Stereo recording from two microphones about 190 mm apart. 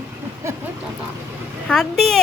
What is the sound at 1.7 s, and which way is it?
Speech, 5° left (ahead or behind).